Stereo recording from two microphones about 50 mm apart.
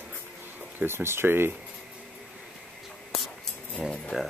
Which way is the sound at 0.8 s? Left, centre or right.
Right.